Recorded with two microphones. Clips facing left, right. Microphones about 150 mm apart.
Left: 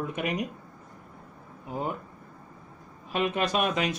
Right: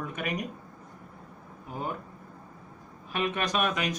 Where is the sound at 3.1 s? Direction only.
25° left (ahead or behind).